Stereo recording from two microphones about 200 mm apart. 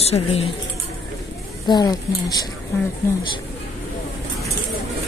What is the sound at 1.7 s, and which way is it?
Speech, 20° left (ahead or behind).